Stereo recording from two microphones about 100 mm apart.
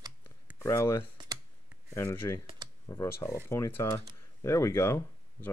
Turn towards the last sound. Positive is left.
turn(degrees=25)  # may be behind; listen again after turning